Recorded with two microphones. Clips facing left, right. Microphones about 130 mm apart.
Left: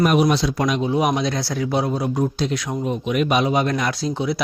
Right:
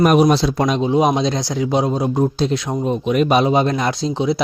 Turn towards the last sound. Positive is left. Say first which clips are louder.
# right 4 dB
turn(degrees=-20)  # may be behind; listen again after turning